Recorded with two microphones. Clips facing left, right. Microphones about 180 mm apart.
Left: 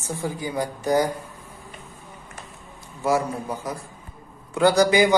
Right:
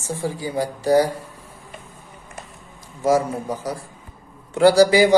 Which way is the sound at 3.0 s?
40° right (ahead or behind).